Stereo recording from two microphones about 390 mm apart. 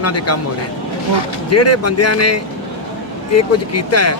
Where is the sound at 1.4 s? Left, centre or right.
Left.